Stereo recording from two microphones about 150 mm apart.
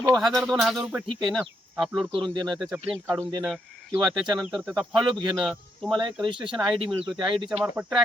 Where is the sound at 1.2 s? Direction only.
Centre (ahead or behind).